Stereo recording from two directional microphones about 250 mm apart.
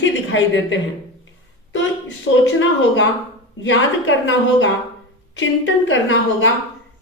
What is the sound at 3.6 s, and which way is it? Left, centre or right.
A woman's voice, left.